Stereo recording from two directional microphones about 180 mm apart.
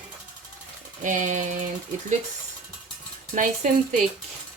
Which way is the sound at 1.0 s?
45° right (ahead or behind).